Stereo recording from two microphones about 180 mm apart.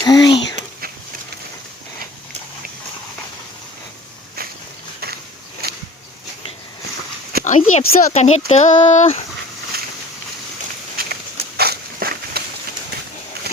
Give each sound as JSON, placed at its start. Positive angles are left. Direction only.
{"t": 0.0, "sound": "speech", "side_deg": 20}
{"t": 5.6, "sound": "a sound", "side_deg": -60}
{"t": 7.4, "sound": "speech", "side_deg": 45}
{"t": 10.9, "sound": "walk", "side_deg": -60}